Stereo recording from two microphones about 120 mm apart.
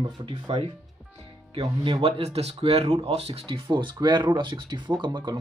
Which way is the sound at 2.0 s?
55° right (ahead or behind).